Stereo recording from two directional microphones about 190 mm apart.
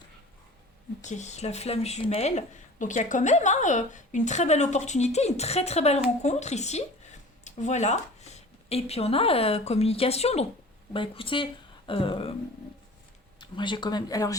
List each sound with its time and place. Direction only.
1.0 s a woman's voice: 35° left (ahead or behind)
13.4 s speech: 25° left (ahead or behind)